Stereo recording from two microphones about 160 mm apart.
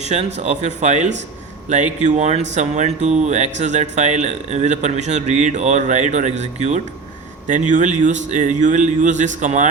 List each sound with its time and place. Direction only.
0.0 s speech: 45° right (ahead or behind)